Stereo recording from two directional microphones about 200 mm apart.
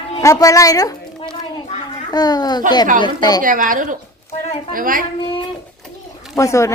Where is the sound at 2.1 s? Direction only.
20° left (ahead or behind).